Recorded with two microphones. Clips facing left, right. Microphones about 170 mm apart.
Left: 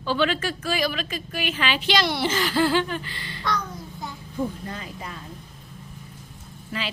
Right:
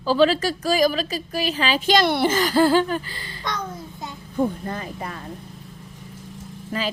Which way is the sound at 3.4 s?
20° right (ahead or behind).